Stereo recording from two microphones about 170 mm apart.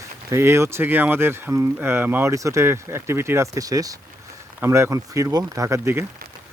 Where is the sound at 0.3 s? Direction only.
15° right (ahead or behind).